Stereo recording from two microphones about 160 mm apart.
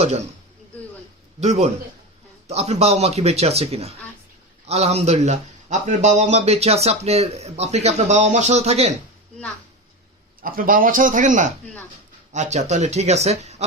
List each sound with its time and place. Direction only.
0.0 s a man's voice: 45° right (ahead or behind)
1.4 s a man's voice: 45° right (ahead or behind)
10.4 s a man's voice: 60° right (ahead or behind); by 13.7 s 45° right (ahead or behind)